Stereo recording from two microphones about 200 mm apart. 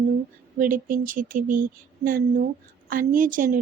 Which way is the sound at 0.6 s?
45° right (ahead or behind).